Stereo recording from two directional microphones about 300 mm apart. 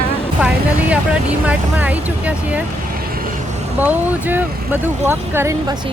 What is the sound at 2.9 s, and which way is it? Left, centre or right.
Vehicle, right.